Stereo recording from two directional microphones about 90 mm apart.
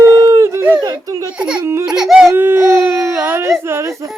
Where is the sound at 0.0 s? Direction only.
35° right (ahead or behind).